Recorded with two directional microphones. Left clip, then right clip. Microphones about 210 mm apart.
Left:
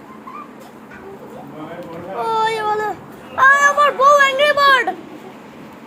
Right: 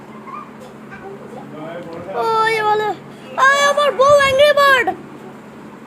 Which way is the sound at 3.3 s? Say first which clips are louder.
Left 1 dB; 25° right (ahead or behind).